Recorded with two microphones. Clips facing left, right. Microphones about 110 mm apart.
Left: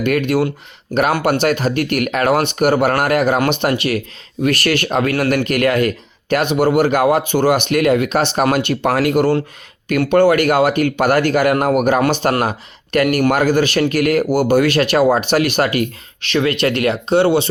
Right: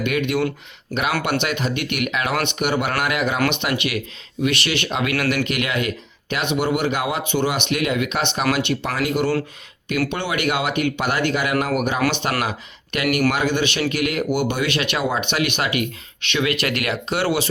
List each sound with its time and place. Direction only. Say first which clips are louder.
0.0 s speech: left 5 dB; 40° left (ahead or behind); by 9.1 s 60° left (ahead or behind)
10.1 s speech: left 11 dB; 45° left (ahead or behind); by 17.5 s 25° left (ahead or behind)